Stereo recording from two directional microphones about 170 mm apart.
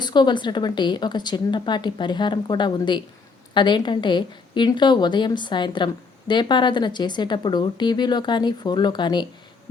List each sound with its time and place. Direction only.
0.0 s a woman's voice: 25° left (ahead or behind)